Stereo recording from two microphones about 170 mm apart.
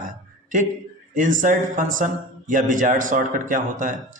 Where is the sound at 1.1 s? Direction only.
50° right (ahead or behind).